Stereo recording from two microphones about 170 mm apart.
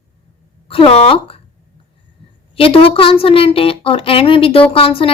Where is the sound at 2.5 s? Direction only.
35° left (ahead or behind).